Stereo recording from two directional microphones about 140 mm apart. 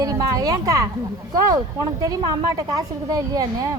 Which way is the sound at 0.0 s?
25° right (ahead or behind).